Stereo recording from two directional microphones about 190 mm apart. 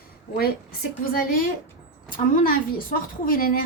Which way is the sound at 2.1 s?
45° left (ahead or behind).